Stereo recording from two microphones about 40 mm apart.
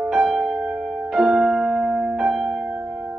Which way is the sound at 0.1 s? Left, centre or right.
Centre.